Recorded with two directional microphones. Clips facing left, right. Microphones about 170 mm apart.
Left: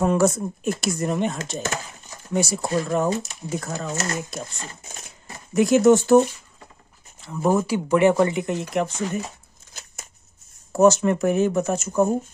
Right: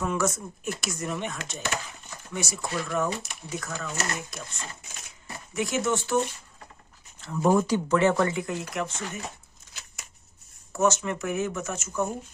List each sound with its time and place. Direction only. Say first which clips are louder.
0.0 s speech: left 8 dB; 35° left (ahead or behind)
5.5 s speech: left 12 dB; 40° left (ahead or behind)
7.4 s speech: left 1 dB; 10° left (ahead or behind)
8.7 s speech: left 8 dB; 35° left (ahead or behind)
10.7 s speech: left 8 dB; 35° left (ahead or behind)